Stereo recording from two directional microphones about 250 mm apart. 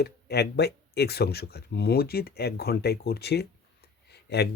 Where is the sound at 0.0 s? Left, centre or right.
Left.